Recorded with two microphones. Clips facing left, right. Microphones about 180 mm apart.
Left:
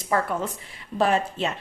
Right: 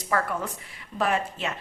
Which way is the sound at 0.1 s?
25° left (ahead or behind).